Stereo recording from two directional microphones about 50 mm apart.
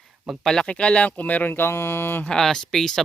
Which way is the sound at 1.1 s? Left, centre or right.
Left.